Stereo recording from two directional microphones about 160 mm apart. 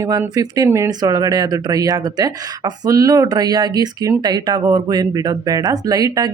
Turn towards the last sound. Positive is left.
turn(degrees=-20)  # may be behind; listen again after turning